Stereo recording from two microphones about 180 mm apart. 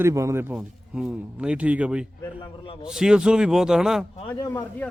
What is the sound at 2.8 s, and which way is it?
A man's voice, 5° right (ahead or behind).